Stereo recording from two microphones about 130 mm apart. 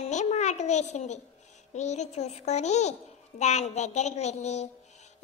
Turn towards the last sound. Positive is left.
turn(degrees=60)  # may be behind; listen again after turning